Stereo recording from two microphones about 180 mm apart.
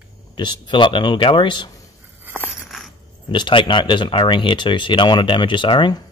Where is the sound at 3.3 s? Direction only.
25° left (ahead or behind).